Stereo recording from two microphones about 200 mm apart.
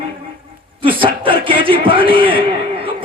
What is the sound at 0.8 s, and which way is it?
A man's voice, 25° right (ahead or behind).